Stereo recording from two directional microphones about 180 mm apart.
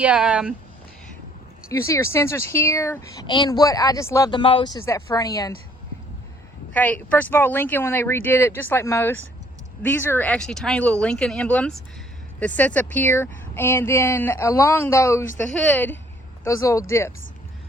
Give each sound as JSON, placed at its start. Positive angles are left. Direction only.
{"t": 0.0, "sound": "speech", "side_deg": -5}
{"t": 1.6, "sound": "speech", "side_deg": 15}
{"t": 3.2, "sound": "speech", "side_deg": 25}
{"t": 6.7, "sound": "speech", "side_deg": 10}